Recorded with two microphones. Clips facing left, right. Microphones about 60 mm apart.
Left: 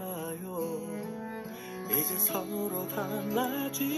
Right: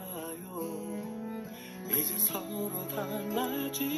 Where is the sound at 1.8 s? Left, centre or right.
Centre.